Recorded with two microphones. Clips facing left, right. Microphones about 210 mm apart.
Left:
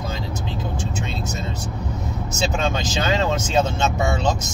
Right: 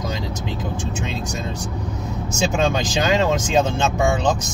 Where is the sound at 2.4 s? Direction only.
15° right (ahead or behind).